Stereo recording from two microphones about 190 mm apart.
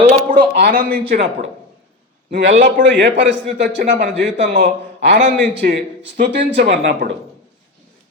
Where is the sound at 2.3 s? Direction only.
70° right (ahead or behind).